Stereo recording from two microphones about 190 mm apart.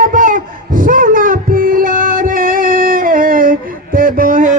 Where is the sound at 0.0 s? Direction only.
45° right (ahead or behind).